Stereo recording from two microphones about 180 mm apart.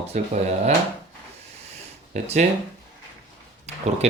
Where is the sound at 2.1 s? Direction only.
40° right (ahead or behind).